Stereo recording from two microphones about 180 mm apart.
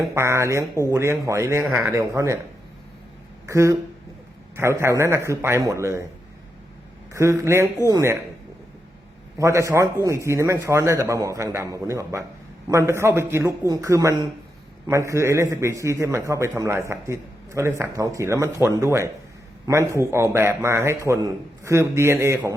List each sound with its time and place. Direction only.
0.0 s a man's voice: 15° right (ahead or behind)
3.4 s speech: 15° right (ahead or behind)
4.8 s a man's voice: 15° right (ahead or behind)
7.1 s a man's voice: 15° right (ahead or behind)
9.4 s a man's voice: 15° right (ahead or behind)